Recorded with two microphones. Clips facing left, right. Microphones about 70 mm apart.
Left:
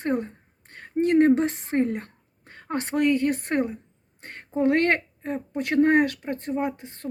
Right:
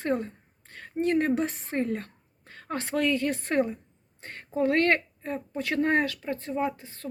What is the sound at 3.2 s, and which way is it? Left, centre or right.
Speech, left.